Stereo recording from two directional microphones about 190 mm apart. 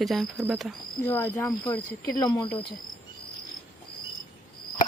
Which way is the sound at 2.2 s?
20° left (ahead or behind).